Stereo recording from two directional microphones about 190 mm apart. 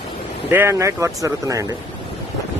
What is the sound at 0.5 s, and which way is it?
Speech, 15° right (ahead or behind).